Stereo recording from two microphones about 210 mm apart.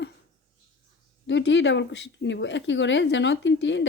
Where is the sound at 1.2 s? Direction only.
60° left (ahead or behind).